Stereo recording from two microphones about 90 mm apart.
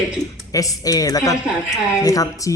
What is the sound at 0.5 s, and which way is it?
A man's voice, 40° left (ahead or behind).